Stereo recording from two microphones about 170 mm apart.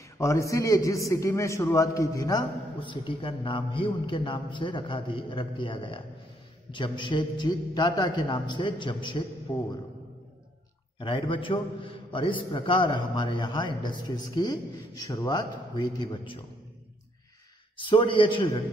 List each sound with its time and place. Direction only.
0.2 s a man's voice: 20° left (ahead or behind)
11.0 s a man's voice: 30° left (ahead or behind)
17.7 s a man's voice: 30° left (ahead or behind)